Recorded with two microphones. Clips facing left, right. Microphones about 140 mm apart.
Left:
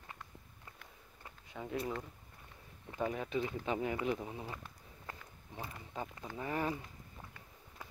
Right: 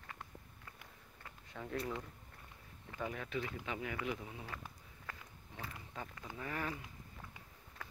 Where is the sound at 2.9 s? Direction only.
25° left (ahead or behind).